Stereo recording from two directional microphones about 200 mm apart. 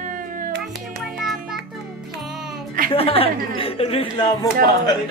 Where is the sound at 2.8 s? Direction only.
30° left (ahead or behind).